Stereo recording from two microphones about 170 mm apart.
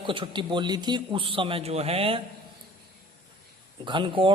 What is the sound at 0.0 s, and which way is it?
A man's voice, 30° right (ahead or behind).